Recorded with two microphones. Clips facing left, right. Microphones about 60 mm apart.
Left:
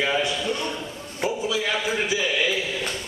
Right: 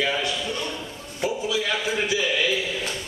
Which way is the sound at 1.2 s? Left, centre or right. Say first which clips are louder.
Even; left.